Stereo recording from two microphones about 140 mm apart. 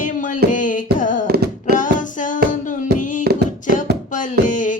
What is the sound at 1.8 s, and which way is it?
Music, 65° left (ahead or behind).